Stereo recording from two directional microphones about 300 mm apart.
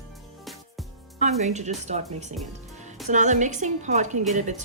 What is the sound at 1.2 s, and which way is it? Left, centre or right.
A woman's voice, right.